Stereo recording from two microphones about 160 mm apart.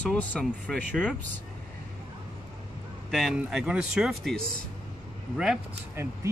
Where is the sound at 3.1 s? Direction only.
Centre (ahead or behind).